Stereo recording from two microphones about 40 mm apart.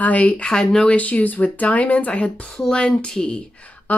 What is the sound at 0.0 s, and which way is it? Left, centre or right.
Speech, left.